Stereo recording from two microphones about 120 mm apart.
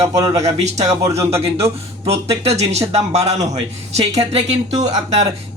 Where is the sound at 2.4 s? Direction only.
60° right (ahead or behind).